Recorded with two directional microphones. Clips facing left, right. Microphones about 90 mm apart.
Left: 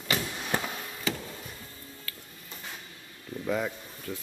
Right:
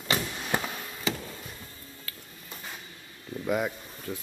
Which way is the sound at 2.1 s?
25° right (ahead or behind).